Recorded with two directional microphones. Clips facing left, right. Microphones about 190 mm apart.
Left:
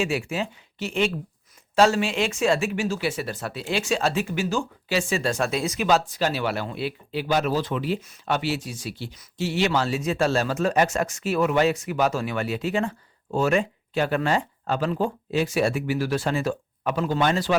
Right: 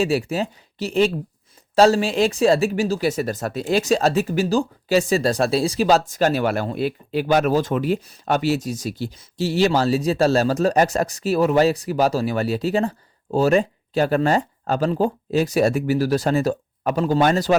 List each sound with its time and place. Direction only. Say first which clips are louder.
0.0 s speech: right 5 dB; 35° right (ahead or behind)